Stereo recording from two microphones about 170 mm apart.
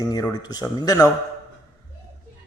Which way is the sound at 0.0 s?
20° left (ahead or behind).